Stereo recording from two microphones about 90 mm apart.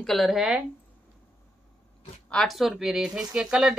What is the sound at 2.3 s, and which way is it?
Speech, 5° left (ahead or behind).